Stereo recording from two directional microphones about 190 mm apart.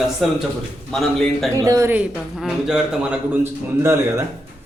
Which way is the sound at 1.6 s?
15° right (ahead or behind).